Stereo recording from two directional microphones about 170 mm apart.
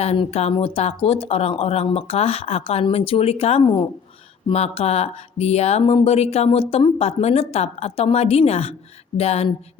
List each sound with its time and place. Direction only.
0.0 s speech: 35° left (ahead or behind)